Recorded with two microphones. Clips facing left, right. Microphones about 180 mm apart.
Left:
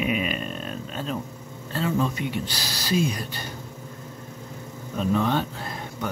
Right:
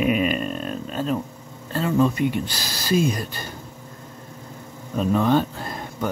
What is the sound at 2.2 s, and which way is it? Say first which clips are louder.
A man's voice: right 6 dB; 50° right (ahead or behind).